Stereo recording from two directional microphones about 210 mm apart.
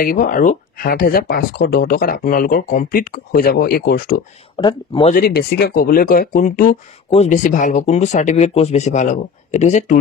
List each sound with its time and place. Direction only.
0.0 s speech: 40° left (ahead or behind)
4.6 s speech: 20° left (ahead or behind)
5.1 s speech: 45° left (ahead or behind)